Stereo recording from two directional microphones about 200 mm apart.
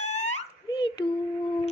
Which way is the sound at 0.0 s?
35° left (ahead or behind).